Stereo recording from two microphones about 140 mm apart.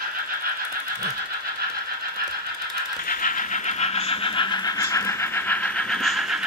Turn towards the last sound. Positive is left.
turn(degrees=0)  # may be behind; listen again after turning